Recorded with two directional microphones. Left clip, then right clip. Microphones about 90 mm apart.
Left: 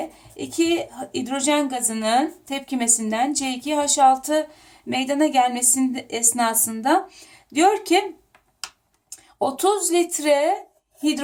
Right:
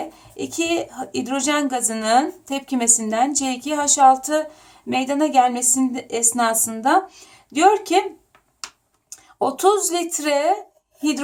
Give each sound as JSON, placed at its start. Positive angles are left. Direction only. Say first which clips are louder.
{"t": 0.5, "sound": "a woman's voice", "louder": "left 1 dB", "side_deg": -30}
{"t": 9.4, "sound": "a woman's voice", "louder": "right 3 dB", "side_deg": -25}